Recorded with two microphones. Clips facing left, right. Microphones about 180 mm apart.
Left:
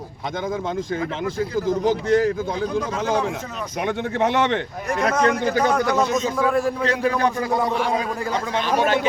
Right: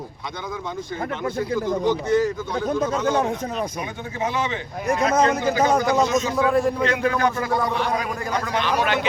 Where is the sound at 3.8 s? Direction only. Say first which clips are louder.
Left 6 dB; 75° left (ahead or behind).